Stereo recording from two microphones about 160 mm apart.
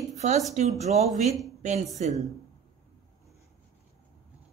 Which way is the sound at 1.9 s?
45° right (ahead or behind).